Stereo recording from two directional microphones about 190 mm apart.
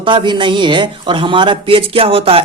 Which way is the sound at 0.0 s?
25° right (ahead or behind).